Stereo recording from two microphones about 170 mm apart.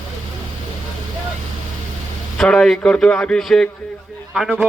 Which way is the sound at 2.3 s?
5° left (ahead or behind).